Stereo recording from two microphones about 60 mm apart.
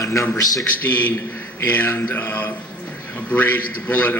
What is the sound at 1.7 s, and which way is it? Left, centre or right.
Mantra, left.